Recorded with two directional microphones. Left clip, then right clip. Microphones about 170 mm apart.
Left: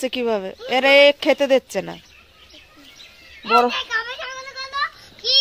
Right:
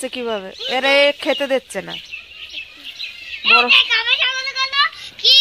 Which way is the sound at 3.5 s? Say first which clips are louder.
Right 5 dB; 15° left (ahead or behind).